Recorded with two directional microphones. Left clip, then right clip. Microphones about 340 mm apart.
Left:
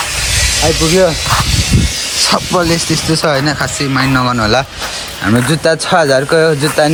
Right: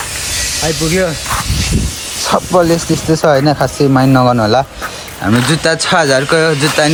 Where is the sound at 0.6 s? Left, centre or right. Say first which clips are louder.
Left 4 dB; centre.